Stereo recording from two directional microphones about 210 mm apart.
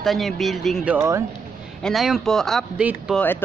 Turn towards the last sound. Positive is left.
turn(degrees=-5)  # may be behind; listen again after turning